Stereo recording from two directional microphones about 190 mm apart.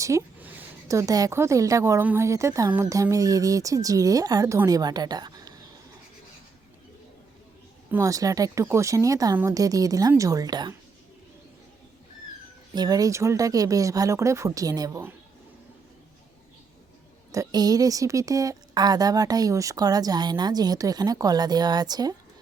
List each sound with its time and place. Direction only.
0.0 s a woman's voice: 15° right (ahead or behind)
7.9 s a woman's voice: 15° right (ahead or behind)
12.7 s a woman's voice: 20° right (ahead or behind)
17.3 s a woman's voice: 20° right (ahead or behind)